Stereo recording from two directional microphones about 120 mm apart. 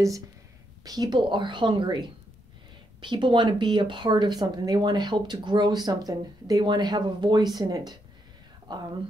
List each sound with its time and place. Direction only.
0.8 s speech: 35° right (ahead or behind)